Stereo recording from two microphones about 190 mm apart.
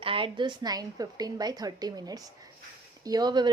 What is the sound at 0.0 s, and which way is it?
A woman's voice, 25° right (ahead or behind).